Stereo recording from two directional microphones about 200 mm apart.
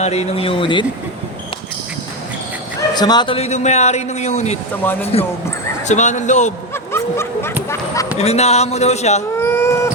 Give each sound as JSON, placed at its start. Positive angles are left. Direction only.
{"t": 0.0, "sound": "speech", "side_deg": 30}
{"t": 2.9, "sound": "a man's voice", "side_deg": 20}
{"t": 4.8, "sound": "speech", "side_deg": 10}
{"t": 5.9, "sound": "a man's voice", "side_deg": 35}
{"t": 6.9, "sound": "snicker", "side_deg": 10}
{"t": 8.2, "sound": "a man's voice", "side_deg": 30}
{"t": 9.4, "sound": "a sound", "side_deg": 10}